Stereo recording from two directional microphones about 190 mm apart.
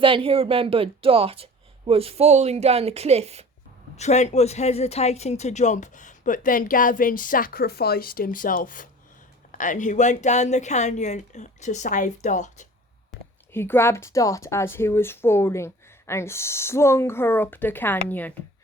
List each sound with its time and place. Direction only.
0.0 s speech: 30° right (ahead or behind)
3.9 s speech: 35° left (ahead or behind)
13.5 s speech: 10° left (ahead or behind)